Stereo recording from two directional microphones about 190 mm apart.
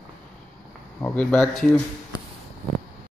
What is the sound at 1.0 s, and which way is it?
Speech, 5° left (ahead or behind).